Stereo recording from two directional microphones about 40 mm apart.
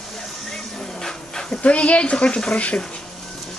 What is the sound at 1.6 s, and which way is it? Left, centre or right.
Speech, left.